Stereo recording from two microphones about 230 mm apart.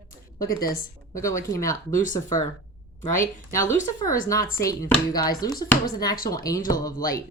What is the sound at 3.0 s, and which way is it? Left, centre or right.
Speech, centre.